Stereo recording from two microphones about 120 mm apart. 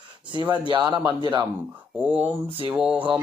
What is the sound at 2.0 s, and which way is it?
Speech, 10° right (ahead or behind).